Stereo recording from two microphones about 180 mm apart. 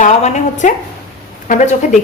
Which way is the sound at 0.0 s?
40° left (ahead or behind).